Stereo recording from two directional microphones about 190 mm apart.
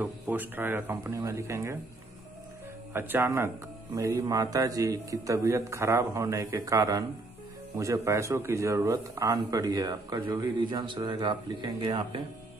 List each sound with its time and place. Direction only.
0.0 s speech: 10° right (ahead or behind)
2.9 s speech: 10° right (ahead or behind); by 12.2 s 25° right (ahead or behind)